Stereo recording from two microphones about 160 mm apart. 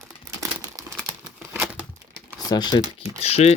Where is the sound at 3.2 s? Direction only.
40° left (ahead or behind).